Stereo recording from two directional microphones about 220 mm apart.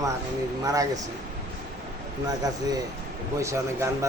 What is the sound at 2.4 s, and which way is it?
A man's voice, 15° right (ahead or behind).